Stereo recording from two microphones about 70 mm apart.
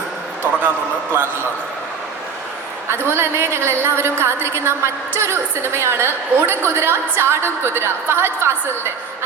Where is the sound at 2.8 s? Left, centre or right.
Right.